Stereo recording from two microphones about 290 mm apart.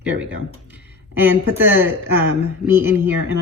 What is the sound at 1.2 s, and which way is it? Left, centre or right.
Speech, centre.